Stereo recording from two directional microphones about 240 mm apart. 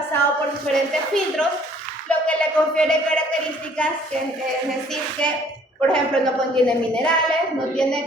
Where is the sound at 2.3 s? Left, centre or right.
Centre.